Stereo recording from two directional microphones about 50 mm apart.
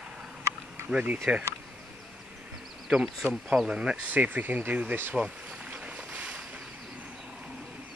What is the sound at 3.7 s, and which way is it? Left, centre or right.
Speech, centre.